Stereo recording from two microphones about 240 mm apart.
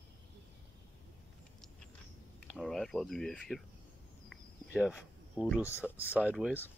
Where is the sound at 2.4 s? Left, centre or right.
Centre.